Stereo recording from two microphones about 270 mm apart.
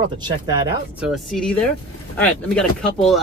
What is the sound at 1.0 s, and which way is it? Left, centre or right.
Speech, centre.